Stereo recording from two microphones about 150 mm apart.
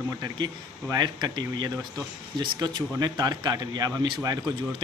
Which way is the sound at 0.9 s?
30° right (ahead or behind).